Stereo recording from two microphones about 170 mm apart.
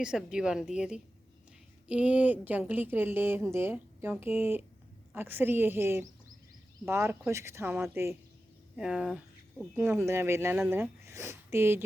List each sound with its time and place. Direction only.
0.0 s a woman's voice: 5° right (ahead or behind)
9.7 s a woman's voice: 15° right (ahead or behind)